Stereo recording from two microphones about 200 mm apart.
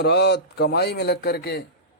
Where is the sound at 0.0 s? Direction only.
55° left (ahead or behind).